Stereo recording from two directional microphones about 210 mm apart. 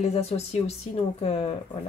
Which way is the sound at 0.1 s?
30° left (ahead or behind).